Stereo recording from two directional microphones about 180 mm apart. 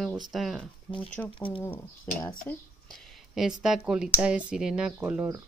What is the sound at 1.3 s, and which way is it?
Speech, 30° left (ahead or behind).